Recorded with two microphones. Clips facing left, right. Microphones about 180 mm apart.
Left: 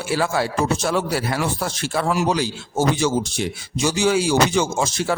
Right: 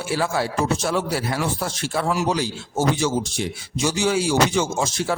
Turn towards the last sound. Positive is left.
turn(degrees=70)  # may be behind; listen again after turning